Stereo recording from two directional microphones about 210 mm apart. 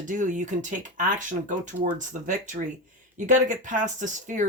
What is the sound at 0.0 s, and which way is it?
Speech, 40° right (ahead or behind).